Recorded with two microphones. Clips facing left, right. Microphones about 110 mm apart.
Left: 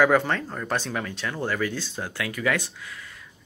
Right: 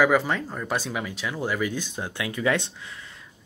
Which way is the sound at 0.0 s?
5° right (ahead or behind).